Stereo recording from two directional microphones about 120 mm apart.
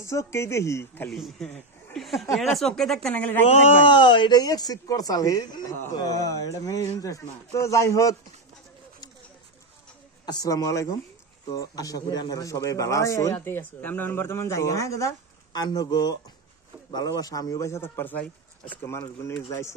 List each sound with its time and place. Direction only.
0.0 s a man's voice: 25° left (ahead or behind)
1.0 s speech: centre (ahead or behind)
3.8 s a man's voice: 45° left (ahead or behind); by 8.2 s 25° left (ahead or behind)
10.2 s a man's voice: 30° left (ahead or behind)